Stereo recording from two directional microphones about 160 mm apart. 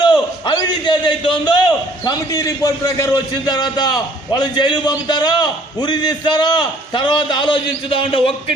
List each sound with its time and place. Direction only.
0.0 s a man's voice: 30° left (ahead or behind)